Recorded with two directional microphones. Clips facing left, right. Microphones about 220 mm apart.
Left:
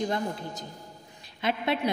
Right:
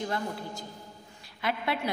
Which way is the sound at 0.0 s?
20° left (ahead or behind).